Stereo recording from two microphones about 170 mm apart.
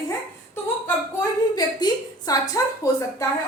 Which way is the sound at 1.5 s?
20° left (ahead or behind).